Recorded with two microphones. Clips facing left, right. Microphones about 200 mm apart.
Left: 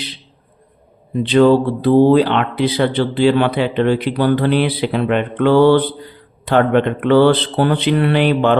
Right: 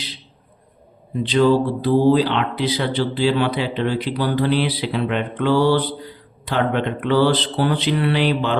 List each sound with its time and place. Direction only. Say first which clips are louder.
1.2 s speech: left 5 dB; 60° left (ahead or behind)